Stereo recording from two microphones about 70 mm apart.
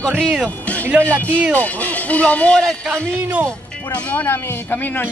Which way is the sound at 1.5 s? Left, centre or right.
Left.